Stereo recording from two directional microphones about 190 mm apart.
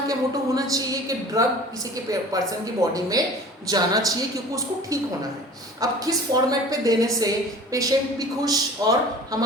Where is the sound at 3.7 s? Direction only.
20° right (ahead or behind).